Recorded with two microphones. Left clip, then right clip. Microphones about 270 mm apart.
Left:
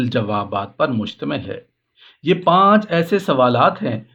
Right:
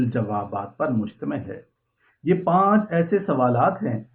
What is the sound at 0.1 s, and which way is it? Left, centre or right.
Speech, left.